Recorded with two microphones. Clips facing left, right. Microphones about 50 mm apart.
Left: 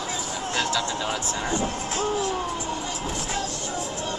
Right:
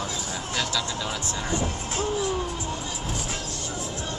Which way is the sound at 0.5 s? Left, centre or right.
Left.